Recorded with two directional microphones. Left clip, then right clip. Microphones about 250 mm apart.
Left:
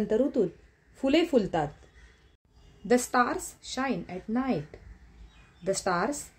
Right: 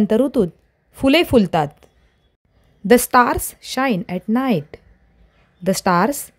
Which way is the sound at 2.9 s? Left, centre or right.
Right.